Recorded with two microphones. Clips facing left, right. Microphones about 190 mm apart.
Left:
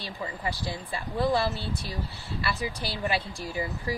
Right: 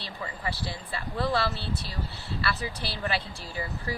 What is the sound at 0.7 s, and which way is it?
Speech, 15° left (ahead or behind).